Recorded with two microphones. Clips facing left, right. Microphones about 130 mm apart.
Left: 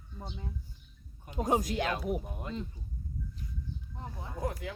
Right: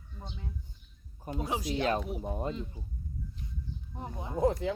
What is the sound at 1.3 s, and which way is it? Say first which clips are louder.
Speech: left 3 dB; 45° left (ahead or behind).